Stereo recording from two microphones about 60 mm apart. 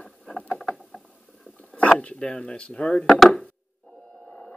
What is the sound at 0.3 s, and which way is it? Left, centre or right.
Rowboat, centre.